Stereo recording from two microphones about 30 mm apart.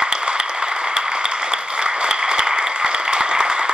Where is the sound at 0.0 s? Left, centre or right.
Right.